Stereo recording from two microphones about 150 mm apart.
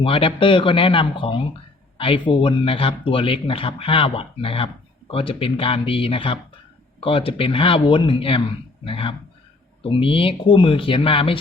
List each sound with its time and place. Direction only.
0.0 s speech: 35° left (ahead or behind)